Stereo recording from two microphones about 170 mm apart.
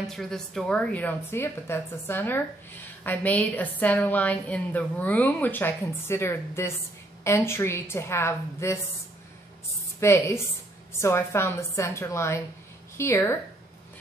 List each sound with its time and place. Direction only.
0.0 s a woman's voice: centre (ahead or behind)
9.9 s a woman's voice: 15° left (ahead or behind)